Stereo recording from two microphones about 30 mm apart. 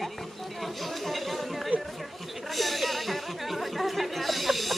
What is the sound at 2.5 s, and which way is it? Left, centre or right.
Chatter, centre.